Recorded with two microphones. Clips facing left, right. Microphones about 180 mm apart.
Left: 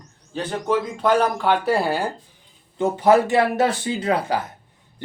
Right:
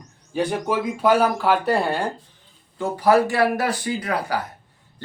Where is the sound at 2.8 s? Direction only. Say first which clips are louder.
Left 1 dB; 20° left (ahead or behind).